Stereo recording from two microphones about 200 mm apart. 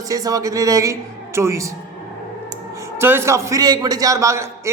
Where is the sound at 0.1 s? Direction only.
15° right (ahead or behind).